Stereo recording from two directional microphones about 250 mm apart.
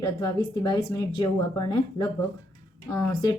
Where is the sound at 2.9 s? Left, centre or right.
Centre.